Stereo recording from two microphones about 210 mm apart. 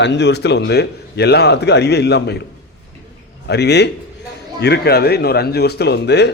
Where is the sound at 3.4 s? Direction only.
55° left (ahead or behind).